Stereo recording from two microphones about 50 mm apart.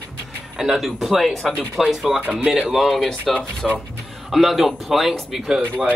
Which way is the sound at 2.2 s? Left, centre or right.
Right.